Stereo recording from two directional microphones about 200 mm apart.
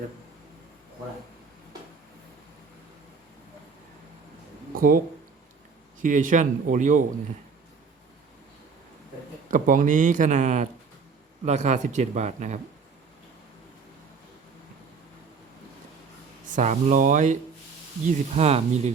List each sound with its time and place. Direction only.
4.8 s a man's voice: 45° right (ahead or behind)
9.5 s a man's voice: 40° right (ahead or behind)
16.6 s a man's voice: 35° right (ahead or behind)